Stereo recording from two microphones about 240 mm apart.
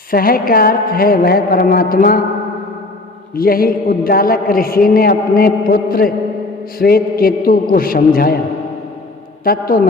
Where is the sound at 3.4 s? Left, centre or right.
Left.